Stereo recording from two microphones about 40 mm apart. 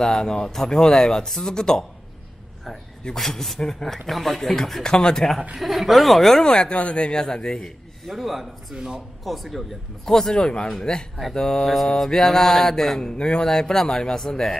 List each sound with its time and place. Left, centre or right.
0.0 s speech: centre
3.2 s speech: centre
4.8 s speech: centre
5.6 s speech: centre
6.4 s speech: left
7.2 s speech: centre
8.1 s speech: centre
8.7 s speech: right
9.2 s speech: centre
10.3 s speech: centre
13.0 s speech: centre